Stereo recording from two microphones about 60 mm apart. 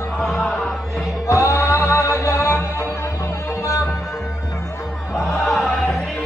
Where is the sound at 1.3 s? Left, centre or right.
Left.